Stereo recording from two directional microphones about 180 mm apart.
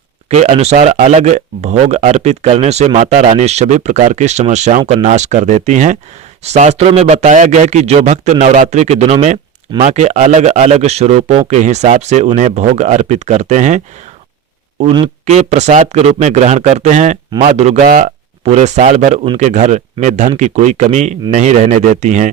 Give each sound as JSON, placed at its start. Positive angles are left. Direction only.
{"t": 0.3, "sound": "speech", "side_deg": -35}
{"t": 15.3, "sound": "speech", "side_deg": -40}
{"t": 17.8, "sound": "speech", "side_deg": -50}